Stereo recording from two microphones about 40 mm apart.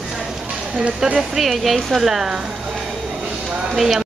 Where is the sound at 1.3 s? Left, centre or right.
Centre.